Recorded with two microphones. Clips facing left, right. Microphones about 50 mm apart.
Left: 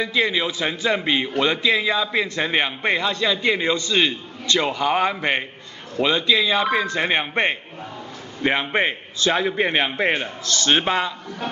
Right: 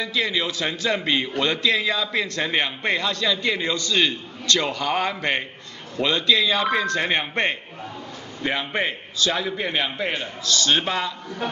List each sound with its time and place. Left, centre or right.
0.0 s a man's voice: left